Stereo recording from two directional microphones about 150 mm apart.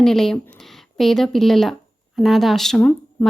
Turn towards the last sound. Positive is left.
turn(degrees=10)  # may be behind; listen again after turning